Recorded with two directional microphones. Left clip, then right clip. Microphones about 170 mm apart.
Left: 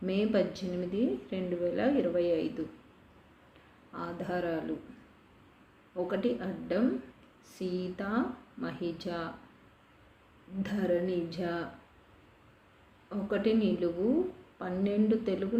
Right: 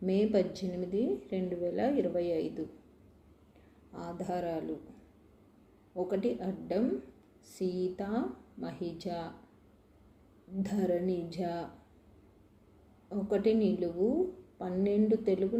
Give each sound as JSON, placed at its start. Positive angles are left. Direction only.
{"t": 0.0, "sound": "a woman's voice", "side_deg": -30}
{"t": 3.9, "sound": "a woman's voice", "side_deg": -30}
{"t": 6.1, "sound": "a woman's voice", "side_deg": -30}
{"t": 10.6, "sound": "a woman's voice", "side_deg": -30}
{"t": 13.1, "sound": "a woman's voice", "side_deg": -30}